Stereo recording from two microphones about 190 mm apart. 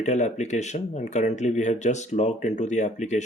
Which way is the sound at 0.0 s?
35° left (ahead or behind).